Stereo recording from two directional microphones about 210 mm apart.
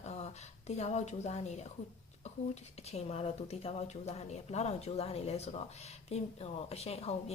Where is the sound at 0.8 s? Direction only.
35° left (ahead or behind).